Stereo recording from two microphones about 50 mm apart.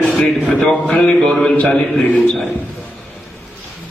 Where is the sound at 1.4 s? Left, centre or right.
Left.